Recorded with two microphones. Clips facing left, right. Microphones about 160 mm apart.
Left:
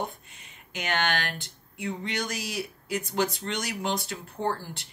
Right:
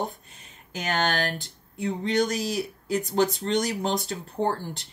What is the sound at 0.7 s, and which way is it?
Speech, 40° right (ahead or behind).